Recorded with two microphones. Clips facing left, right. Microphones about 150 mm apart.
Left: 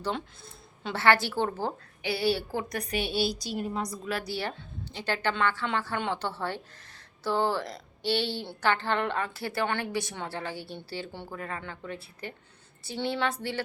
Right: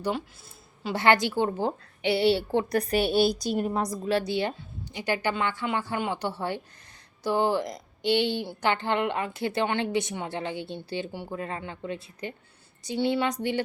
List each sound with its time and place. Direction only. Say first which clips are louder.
0.9 s a woman's voice: right 2 dB; 15° right (ahead or behind)